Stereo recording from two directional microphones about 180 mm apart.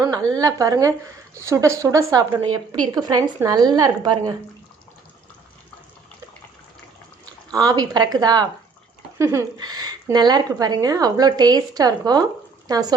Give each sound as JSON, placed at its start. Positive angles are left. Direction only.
{"t": 0.3, "sound": "a woman's voice", "side_deg": -20}
{"t": 7.5, "sound": "speech", "side_deg": -20}